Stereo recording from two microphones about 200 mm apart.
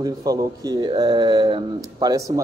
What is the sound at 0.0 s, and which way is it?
Speech, 20° right (ahead or behind).